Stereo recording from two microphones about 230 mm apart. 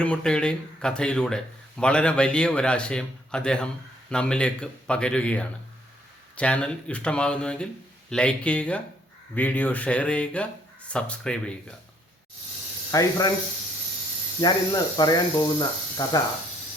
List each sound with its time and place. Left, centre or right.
0.0 s speech: centre
12.9 s speech: centre
14.4 s speech: centre